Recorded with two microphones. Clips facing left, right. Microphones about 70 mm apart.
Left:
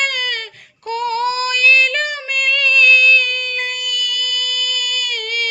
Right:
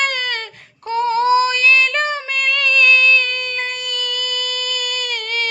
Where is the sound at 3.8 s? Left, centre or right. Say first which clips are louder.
Left 1 dB; right.